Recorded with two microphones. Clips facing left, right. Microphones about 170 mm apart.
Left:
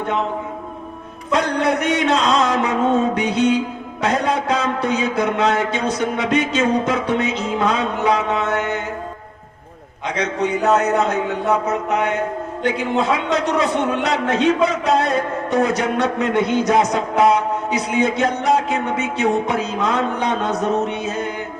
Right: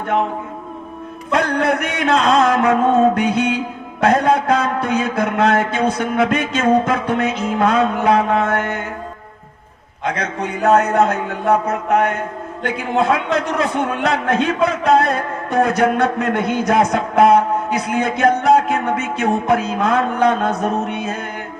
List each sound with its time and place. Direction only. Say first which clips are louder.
1.3 s a man's voice: right 1 dB; 55° right (ahead or behind)
10.0 s a man's voice: left 1 dB; 55° right (ahead or behind)